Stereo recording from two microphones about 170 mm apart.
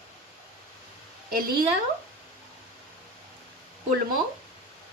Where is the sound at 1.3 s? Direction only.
55° right (ahead or behind).